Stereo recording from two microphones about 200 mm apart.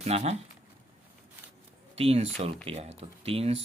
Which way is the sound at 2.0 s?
30° right (ahead or behind).